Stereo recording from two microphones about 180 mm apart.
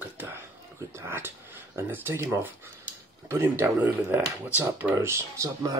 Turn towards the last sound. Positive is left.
turn(degrees=-20)  # may be behind; listen again after turning